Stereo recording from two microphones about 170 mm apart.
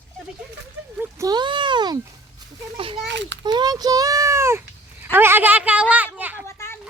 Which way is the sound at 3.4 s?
25° right (ahead or behind).